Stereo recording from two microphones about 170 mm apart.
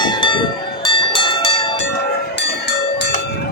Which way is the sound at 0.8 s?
30° left (ahead or behind).